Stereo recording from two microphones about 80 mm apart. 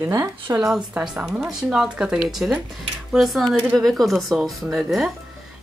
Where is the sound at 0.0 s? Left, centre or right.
Right.